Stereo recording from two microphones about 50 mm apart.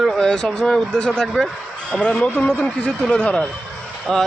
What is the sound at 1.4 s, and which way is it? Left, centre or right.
Speech, left.